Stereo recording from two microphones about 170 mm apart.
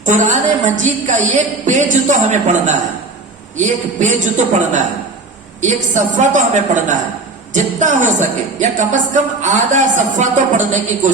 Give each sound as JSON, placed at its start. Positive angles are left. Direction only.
{"t": 0.0, "sound": "speech", "side_deg": -45}